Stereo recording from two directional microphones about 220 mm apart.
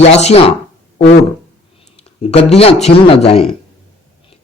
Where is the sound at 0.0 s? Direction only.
30° left (ahead or behind).